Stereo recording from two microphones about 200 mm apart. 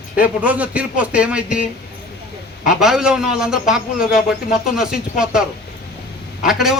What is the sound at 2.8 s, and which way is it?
A man's voice, 5° right (ahead or behind).